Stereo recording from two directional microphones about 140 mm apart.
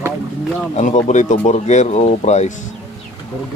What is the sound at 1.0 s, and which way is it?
Speech, 60° left (ahead or behind).